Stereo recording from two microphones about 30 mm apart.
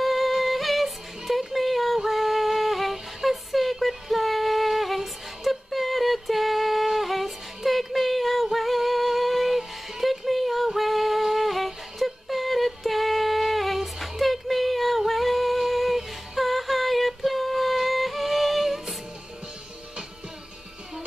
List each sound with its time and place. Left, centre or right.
0.0 s music: centre
1.5 s a sound: centre
6.9 s music: centre
10.8 s humming: centre
13.9 s music: centre
15.0 s a sound: centre